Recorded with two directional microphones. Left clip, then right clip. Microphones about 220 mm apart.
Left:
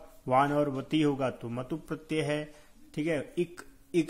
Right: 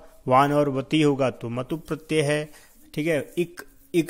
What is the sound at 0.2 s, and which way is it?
Speech, 40° right (ahead or behind).